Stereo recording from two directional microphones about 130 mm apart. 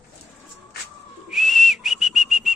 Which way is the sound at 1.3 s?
Centre (ahead or behind).